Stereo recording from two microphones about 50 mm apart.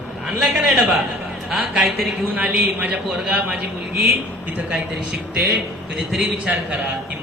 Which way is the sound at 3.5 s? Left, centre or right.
Centre.